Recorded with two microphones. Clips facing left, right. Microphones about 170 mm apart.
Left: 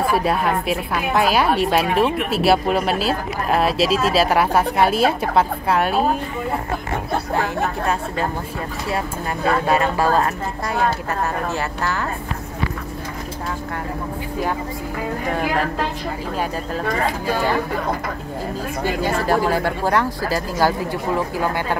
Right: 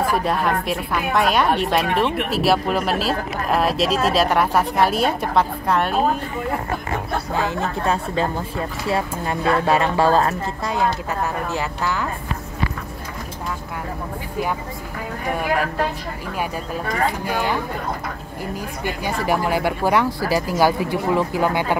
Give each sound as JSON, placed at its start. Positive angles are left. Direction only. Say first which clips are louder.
{"t": 0.1, "sound": "a woman's voice", "louder": "left 1 dB", "side_deg": 5}
{"t": 7.3, "sound": "a woman's voice", "louder": "even", "side_deg": -25}
{"t": 11.5, "sound": "speech", "louder": "even", "side_deg": -15}
{"t": 19.0, "sound": "speech", "louder": "left 1 dB", "side_deg": -15}